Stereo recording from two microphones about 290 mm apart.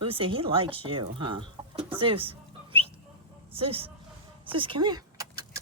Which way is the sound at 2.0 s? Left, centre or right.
Centre.